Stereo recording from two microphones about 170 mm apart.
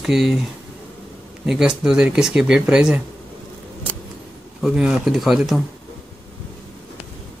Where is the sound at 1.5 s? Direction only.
5° right (ahead or behind).